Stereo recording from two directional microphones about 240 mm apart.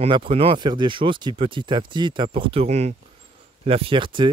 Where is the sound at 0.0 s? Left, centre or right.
Right.